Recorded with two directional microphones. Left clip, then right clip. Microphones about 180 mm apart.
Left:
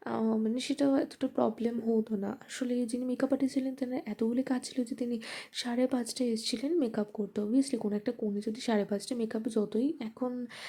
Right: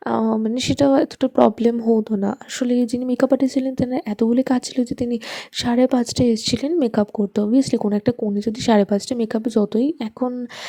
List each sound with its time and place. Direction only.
0.0 s speech: 40° right (ahead or behind)